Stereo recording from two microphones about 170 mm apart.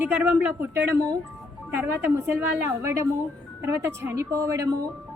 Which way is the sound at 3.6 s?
15° right (ahead or behind).